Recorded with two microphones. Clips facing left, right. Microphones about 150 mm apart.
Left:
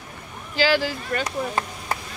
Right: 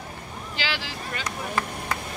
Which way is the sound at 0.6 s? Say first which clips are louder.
Left 11 dB; 45° left (ahead or behind).